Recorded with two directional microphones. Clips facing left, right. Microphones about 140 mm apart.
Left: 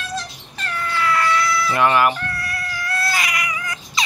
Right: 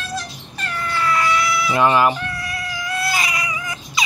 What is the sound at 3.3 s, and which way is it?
Cat, 30° right (ahead or behind).